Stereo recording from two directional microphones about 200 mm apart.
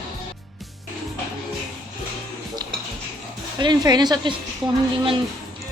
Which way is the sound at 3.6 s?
20° right (ahead or behind).